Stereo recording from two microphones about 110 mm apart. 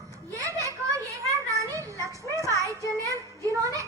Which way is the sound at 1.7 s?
30° right (ahead or behind).